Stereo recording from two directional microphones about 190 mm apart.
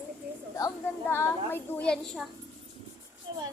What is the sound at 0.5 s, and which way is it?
A child's voice, 15° left (ahead or behind).